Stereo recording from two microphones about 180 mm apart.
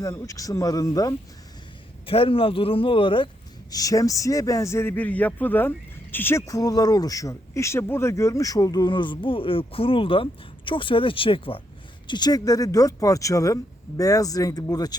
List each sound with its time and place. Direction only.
0.0 s speech: 20° left (ahead or behind)
2.0 s speech: 30° left (ahead or behind)